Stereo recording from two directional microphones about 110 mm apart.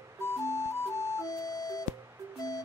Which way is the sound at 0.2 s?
25° left (ahead or behind).